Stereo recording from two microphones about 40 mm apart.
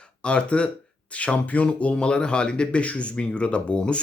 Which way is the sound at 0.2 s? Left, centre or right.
Left.